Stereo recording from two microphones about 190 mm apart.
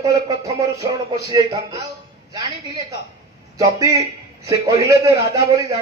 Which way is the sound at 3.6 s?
15° right (ahead or behind).